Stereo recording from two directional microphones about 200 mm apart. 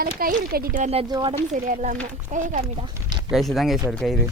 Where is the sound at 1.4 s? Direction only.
40° right (ahead or behind); by 3.3 s 20° right (ahead or behind).